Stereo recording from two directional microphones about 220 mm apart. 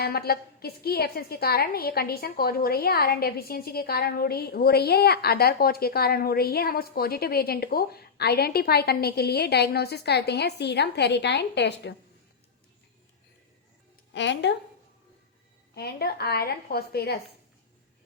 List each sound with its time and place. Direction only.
0.0 s a woman's voice: 45° left (ahead or behind)
14.1 s speech: 55° left (ahead or behind)
15.7 s a woman's voice: 45° left (ahead or behind)